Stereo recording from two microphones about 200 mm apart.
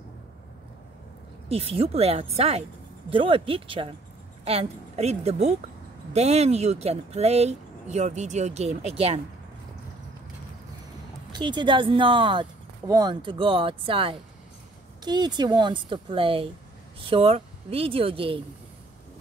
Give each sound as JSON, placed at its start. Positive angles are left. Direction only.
{"t": 1.5, "sound": "speech", "side_deg": -30}
{"t": 11.3, "sound": "speech", "side_deg": -25}